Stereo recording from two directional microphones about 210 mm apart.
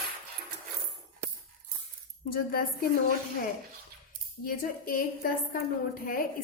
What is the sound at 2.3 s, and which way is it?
Speech, 45° left (ahead or behind).